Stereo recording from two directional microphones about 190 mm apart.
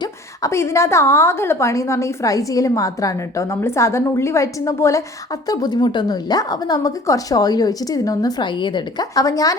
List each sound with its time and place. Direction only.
0.0 s a woman's voice: 15° left (ahead or behind)